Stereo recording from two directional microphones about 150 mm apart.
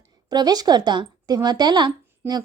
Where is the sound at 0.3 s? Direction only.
25° right (ahead or behind).